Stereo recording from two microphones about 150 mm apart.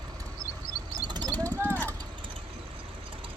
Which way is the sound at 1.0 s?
30° right (ahead or behind).